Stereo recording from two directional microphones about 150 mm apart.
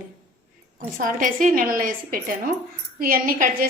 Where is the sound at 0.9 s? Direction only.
65° right (ahead or behind).